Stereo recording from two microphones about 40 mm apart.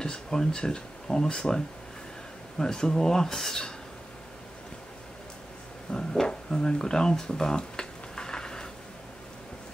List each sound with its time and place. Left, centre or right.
0.0 s speech: centre
2.6 s speech: centre
5.9 s a sound: centre